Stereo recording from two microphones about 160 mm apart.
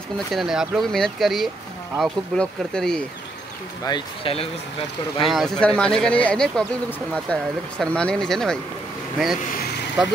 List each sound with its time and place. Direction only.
0.3 s speech: centre (ahead or behind)
3.8 s speech: 30° left (ahead or behind)
5.2 s speech: centre (ahead or behind)